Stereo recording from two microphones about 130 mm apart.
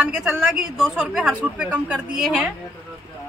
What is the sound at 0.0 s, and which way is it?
A woman's voice, 10° right (ahead or behind).